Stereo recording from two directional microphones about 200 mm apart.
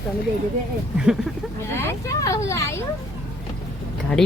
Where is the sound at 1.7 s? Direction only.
15° left (ahead or behind).